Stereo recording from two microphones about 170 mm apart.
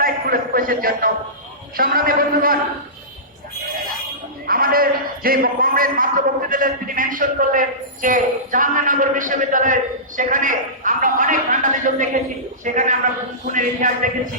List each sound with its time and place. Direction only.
0.0 s a man's voice: 60° right (ahead or behind)
4.4 s a man's voice: 60° right (ahead or behind)